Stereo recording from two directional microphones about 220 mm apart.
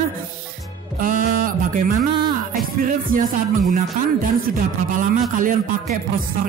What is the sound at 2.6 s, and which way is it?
Music, 40° right (ahead or behind).